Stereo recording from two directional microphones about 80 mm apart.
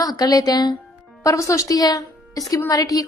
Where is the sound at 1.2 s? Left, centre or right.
Left.